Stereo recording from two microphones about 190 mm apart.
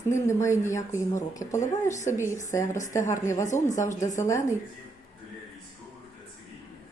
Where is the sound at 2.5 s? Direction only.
15° left (ahead or behind).